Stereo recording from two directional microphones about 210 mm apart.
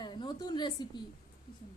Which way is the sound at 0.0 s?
20° left (ahead or behind).